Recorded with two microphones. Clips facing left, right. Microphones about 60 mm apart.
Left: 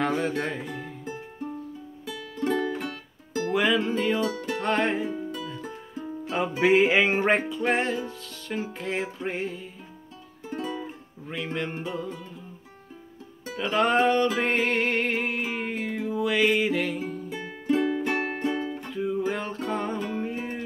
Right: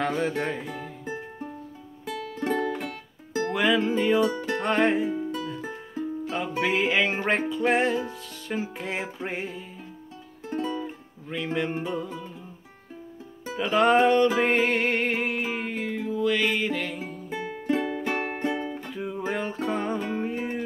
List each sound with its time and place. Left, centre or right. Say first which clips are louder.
0.0 s speech: even; centre
0.4 s music: right 1 dB; centre
2.5 s music: right 1 dB; right
3.4 s music: even; centre
6.2 s music: left 5 dB; centre
7.3 s music: right 2 dB; centre
10.6 s music: right 2 dB; centre
13.6 s music: right 2 dB; centre
17.3 s music: even; right
17.8 s music: left 2 dB; centre